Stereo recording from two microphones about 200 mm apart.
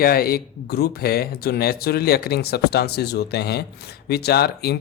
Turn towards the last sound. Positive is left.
turn(degrees=50)  # may be behind; listen again after turning